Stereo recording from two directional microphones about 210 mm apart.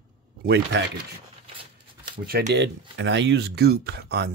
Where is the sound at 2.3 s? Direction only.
50° right (ahead or behind).